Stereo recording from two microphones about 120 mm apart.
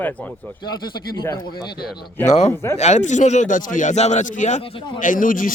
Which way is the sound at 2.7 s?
70° left (ahead or behind).